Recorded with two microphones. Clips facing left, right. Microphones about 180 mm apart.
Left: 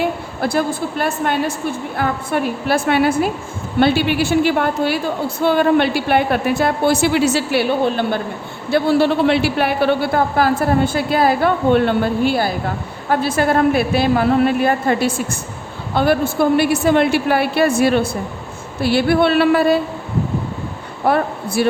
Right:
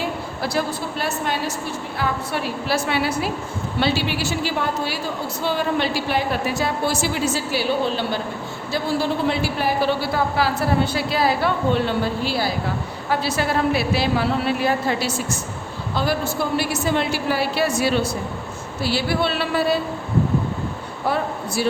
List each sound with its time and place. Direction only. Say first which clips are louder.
0.0 s a woman's voice: left 6 dB; 50° left (ahead or behind)
8.7 s a man's voice: left 8 dB; 65° left (ahead or behind)
21.1 s speech: left 6 dB; 55° left (ahead or behind)